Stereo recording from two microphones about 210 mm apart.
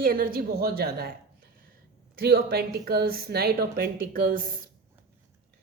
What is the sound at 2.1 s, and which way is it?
Speech, 45° right (ahead or behind).